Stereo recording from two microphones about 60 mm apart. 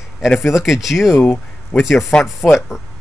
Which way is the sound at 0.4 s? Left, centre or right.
Centre.